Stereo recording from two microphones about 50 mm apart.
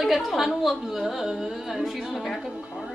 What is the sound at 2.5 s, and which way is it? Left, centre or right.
Speech, right.